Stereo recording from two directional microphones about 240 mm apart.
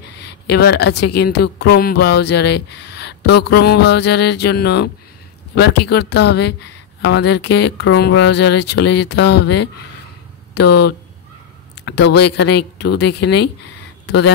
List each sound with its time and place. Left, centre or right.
0.2 s a woman's voice: left
11.8 s a woman's voice: left